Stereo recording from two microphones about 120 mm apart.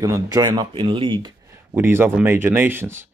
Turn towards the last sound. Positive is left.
turn(degrees=-20)  # may be behind; listen again after turning